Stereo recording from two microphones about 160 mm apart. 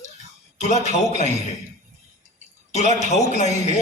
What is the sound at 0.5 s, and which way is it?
Speech, 45° left (ahead or behind).